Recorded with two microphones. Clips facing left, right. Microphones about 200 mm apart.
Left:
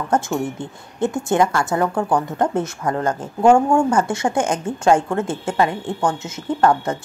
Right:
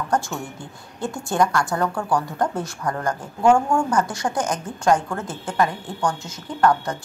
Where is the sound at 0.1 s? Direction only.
20° left (ahead or behind).